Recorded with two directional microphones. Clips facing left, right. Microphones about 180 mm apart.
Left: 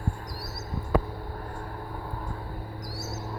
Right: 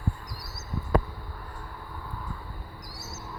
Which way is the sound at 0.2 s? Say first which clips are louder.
Left 5 dB; 40° left (ahead or behind).